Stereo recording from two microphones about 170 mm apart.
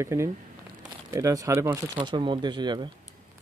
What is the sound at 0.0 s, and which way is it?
Speech, 15° right (ahead or behind).